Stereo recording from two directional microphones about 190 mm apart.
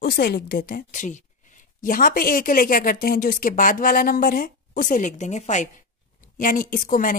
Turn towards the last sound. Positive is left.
turn(degrees=50)  # may be behind; listen again after turning